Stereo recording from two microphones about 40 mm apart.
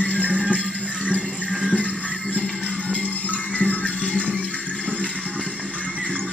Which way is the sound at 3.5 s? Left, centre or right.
Left.